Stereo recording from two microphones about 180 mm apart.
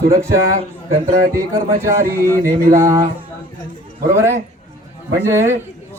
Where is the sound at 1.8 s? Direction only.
15° right (ahead or behind).